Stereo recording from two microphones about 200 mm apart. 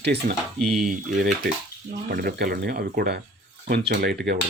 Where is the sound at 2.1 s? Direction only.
50° right (ahead or behind).